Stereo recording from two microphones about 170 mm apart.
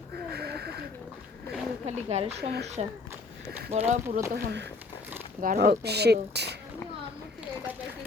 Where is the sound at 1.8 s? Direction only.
40° right (ahead or behind).